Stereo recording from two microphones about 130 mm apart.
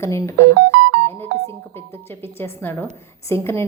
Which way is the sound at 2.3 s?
15° left (ahead or behind).